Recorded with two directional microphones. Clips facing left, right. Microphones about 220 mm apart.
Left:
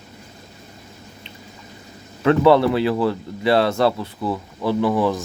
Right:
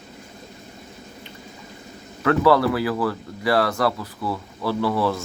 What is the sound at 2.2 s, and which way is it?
Speech, 20° left (ahead or behind).